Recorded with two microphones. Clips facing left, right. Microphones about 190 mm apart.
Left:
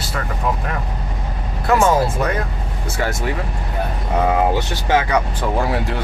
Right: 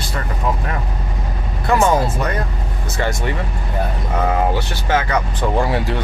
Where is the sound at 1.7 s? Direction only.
Centre (ahead or behind).